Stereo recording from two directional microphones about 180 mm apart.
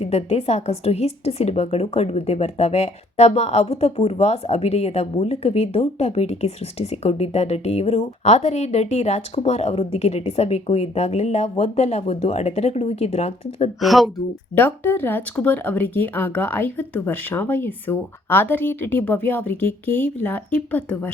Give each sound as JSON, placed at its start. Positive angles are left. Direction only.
{"t": 0.0, "sound": "a woman's voice", "side_deg": 35}
{"t": 13.7, "sound": "speech", "side_deg": 0}
{"t": 14.5, "sound": "speech", "side_deg": 10}